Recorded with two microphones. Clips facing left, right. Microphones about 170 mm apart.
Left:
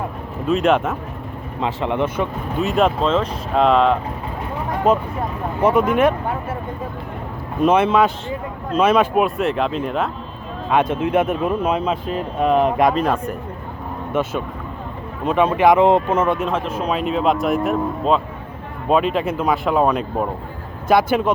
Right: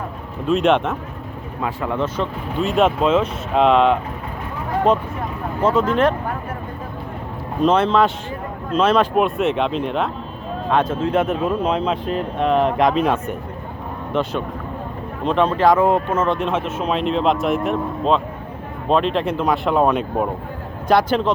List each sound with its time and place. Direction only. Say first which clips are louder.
0.4 s a man's voice: even; centre (ahead or behind)
1.6 s speech: left 2 dB; 20° left (ahead or behind)
2.1 s a man's voice: left 1 dB; 5° left (ahead or behind)
5.5 s speech: left 1 dB; 15° left (ahead or behind)
7.6 s a man's voice: left 1 dB; 10° left (ahead or behind)
10.7 s a man's voice: left 1 dB; 10° left (ahead or behind)
16.5 s a man's voice: even; 5° right (ahead or behind)